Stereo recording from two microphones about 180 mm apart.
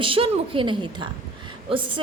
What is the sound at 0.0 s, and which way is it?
A woman's voice, 30° right (ahead or behind).